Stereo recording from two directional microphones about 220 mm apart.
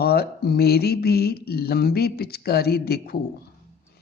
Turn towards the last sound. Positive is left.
turn(degrees=45)  # may be behind; listen again after turning